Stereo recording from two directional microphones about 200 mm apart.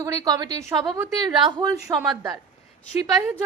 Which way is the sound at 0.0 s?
15° right (ahead or behind).